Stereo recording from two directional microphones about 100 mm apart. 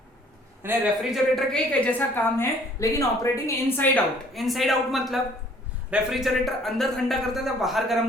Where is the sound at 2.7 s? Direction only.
30° left (ahead or behind).